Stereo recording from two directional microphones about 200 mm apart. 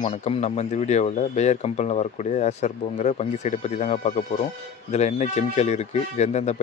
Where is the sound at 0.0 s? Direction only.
30° left (ahead or behind).